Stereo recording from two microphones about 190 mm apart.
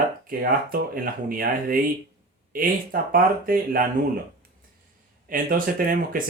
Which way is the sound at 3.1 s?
50° right (ahead or behind).